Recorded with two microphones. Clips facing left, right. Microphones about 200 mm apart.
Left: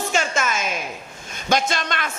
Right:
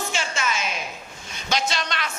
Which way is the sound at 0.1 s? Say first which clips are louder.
Left 5 dB; 45° left (ahead or behind).